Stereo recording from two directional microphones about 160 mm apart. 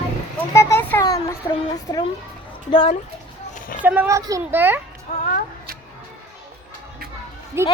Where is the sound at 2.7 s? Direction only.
35° left (ahead or behind).